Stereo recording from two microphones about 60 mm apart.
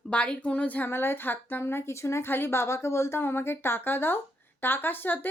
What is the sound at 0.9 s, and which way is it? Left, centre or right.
A woman's voice, left.